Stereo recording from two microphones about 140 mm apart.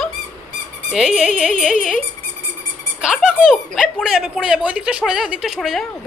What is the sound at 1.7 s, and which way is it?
Speech, 70° left (ahead or behind).